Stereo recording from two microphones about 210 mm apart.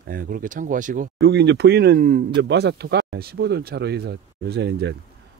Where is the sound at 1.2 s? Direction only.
55° right (ahead or behind).